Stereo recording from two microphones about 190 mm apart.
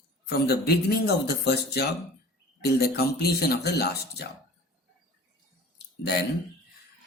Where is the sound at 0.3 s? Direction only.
55° left (ahead or behind).